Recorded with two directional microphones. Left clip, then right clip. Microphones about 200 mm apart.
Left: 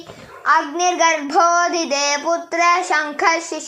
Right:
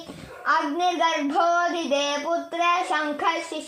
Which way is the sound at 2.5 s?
20° left (ahead or behind).